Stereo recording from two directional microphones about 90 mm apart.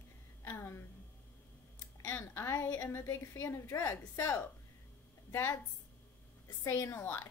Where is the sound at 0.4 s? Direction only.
30° left (ahead or behind).